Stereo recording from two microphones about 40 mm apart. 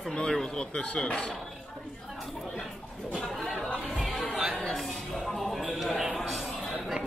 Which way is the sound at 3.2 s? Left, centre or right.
Centre.